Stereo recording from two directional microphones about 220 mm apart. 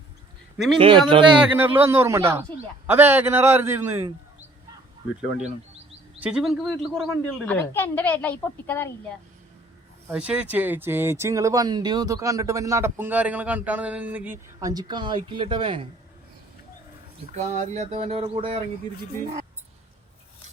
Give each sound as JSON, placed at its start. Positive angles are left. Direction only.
{"t": 0.8, "sound": "speech", "side_deg": -25}
{"t": 1.4, "sound": "speech", "side_deg": -10}
{"t": 6.1, "sound": "speech", "side_deg": -5}
{"t": 10.1, "sound": "speech", "side_deg": -5}
{"t": 17.3, "sound": "speech", "side_deg": -35}